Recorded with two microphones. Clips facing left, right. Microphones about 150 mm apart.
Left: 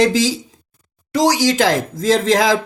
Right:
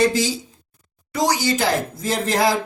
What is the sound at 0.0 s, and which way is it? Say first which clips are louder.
Speech: left 3 dB; 90° left.